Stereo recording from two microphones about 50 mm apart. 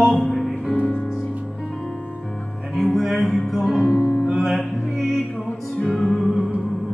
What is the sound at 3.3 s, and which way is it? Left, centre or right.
Music, centre.